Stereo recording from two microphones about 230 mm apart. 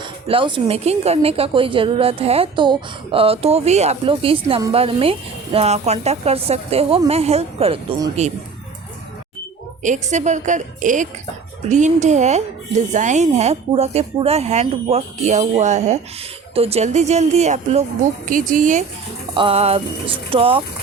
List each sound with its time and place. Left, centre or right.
0.0 s speech: right
9.8 s a woman's voice: right
19.3 s speech: right